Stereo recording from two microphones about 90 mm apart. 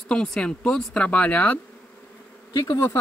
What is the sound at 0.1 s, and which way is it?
Speech, 10° left (ahead or behind).